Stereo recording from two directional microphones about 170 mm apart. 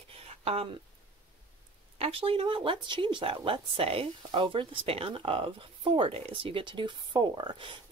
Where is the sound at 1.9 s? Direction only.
35° right (ahead or behind).